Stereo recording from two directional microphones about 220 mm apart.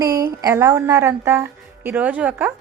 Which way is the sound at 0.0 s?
15° right (ahead or behind).